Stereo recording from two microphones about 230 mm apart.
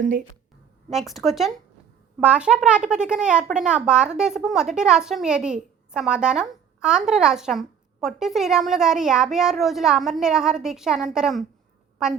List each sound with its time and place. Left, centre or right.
0.9 s a child's voice: centre